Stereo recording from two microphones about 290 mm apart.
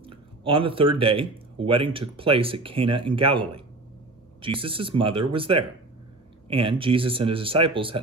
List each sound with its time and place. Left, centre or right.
0.0 s speech: centre